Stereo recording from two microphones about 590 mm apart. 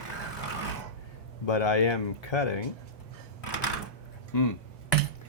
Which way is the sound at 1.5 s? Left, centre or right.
Left.